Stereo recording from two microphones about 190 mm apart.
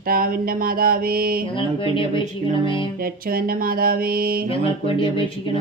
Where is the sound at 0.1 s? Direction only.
50° right (ahead or behind).